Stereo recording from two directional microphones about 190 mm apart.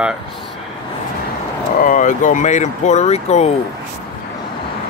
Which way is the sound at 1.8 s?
45° left (ahead or behind).